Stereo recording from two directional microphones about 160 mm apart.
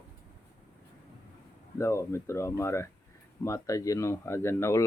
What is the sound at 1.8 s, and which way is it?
Speech, 15° left (ahead or behind).